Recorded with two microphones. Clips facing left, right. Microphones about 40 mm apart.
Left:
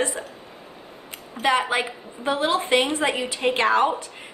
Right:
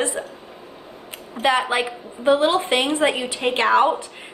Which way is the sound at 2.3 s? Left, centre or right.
Right.